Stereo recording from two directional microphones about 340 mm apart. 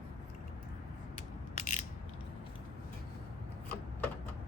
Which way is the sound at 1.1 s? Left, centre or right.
Left.